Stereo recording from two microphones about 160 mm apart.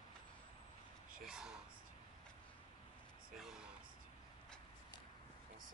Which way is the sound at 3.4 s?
5° right (ahead or behind).